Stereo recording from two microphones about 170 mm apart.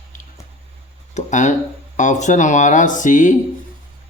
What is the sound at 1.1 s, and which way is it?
Speech, 45° left (ahead or behind).